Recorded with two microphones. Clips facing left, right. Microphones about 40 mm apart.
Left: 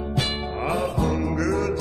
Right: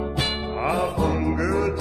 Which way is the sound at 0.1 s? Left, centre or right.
Centre.